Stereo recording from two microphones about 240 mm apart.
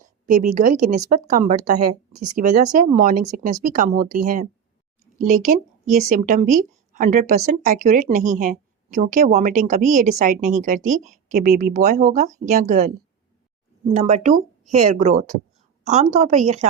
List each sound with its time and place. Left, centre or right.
0.6 s a woman's voice: right
2.1 s speech: right
2.4 s a woman's voice: right
13.9 s a woman's voice: right